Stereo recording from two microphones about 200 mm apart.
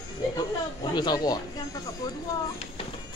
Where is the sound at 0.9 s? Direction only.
20° left (ahead or behind).